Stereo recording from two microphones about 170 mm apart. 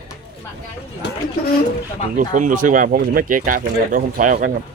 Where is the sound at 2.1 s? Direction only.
50° right (ahead or behind).